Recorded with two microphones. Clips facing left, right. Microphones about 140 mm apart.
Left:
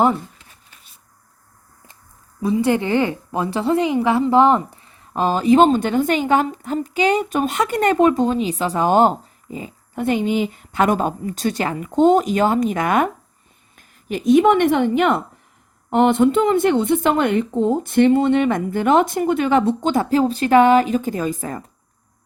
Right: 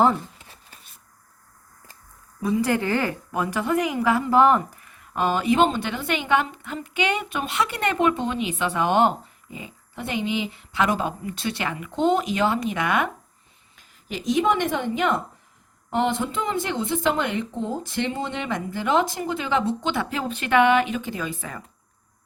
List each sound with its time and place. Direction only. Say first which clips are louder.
2.4 s a woman's voice: left 4 dB; 25° left (ahead or behind); by 21.6 s 40° left (ahead or behind)